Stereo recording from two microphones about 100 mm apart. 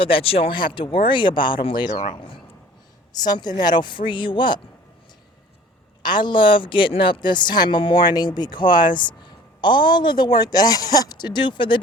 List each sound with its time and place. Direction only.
0.0 s speech: 65° left (ahead or behind)
3.1 s a woman's voice: 45° left (ahead or behind)
6.0 s a woman's voice: 50° left (ahead or behind)